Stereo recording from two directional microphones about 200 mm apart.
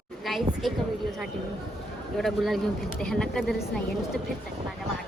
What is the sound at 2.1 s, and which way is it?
A woman's voice, centre (ahead or behind).